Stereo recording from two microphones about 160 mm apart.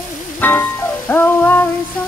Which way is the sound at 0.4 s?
10° left (ahead or behind).